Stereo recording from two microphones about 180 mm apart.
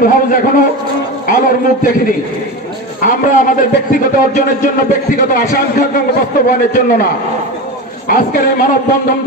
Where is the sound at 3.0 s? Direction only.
45° left (ahead or behind).